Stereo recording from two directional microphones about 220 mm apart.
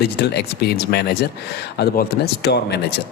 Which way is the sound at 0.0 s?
45° left (ahead or behind).